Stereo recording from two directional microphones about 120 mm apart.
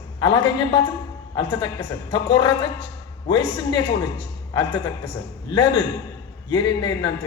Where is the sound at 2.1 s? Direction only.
40° left (ahead or behind).